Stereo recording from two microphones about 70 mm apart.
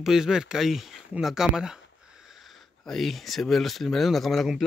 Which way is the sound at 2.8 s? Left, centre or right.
Centre.